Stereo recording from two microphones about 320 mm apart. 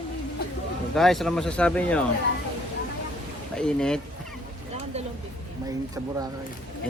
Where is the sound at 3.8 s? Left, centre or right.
Centre.